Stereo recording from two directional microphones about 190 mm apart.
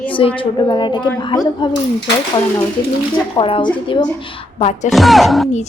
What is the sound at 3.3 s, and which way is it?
Speech, 25° left (ahead or behind).